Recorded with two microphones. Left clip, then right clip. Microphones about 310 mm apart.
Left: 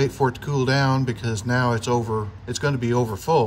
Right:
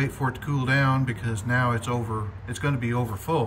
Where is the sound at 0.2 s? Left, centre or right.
Centre.